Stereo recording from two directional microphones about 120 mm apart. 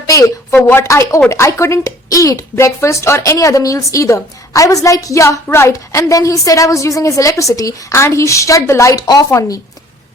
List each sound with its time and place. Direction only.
0.6 s speech: 25° left (ahead or behind)